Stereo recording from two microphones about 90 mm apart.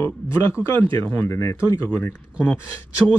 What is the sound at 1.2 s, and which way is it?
Speech, 30° left (ahead or behind).